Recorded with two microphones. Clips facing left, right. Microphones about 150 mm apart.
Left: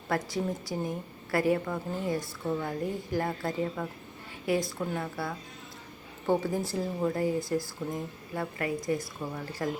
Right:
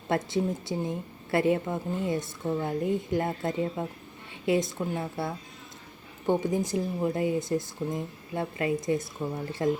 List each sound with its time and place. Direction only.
0.1 s speech: 25° right (ahead or behind)
6.4 s speech: 20° right (ahead or behind)